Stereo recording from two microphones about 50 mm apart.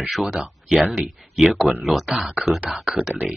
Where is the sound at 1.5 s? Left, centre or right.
Right.